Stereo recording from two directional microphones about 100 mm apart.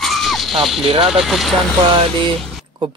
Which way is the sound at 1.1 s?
Centre (ahead or behind).